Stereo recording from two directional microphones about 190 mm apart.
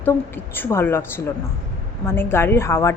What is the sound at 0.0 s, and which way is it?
A woman's voice, 10° left (ahead or behind).